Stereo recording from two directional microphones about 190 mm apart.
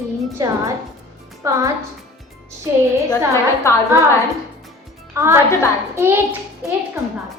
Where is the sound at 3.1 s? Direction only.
15° left (ahead or behind).